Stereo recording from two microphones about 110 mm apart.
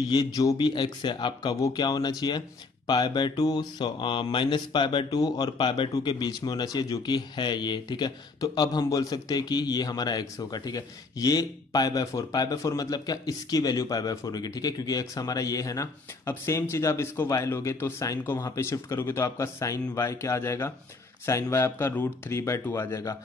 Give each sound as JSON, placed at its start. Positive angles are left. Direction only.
{"t": 0.1, "sound": "mantra", "side_deg": 35}
{"t": 17.3, "sound": "speech", "side_deg": 30}